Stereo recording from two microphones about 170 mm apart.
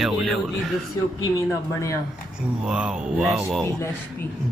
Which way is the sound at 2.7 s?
5° right (ahead or behind).